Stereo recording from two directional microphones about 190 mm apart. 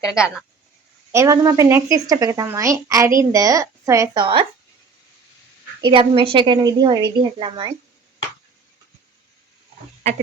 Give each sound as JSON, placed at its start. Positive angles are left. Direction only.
{"t": 0.0, "sound": "speech", "side_deg": -5}
{"t": 1.1, "sound": "speech", "side_deg": -15}
{"t": 5.8, "sound": "a woman's voice", "side_deg": -25}